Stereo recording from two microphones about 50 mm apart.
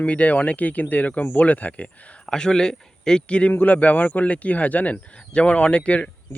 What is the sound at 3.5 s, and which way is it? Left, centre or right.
Speech, left.